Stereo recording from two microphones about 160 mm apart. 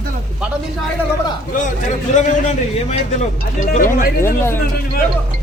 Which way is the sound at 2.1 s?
45° left (ahead or behind).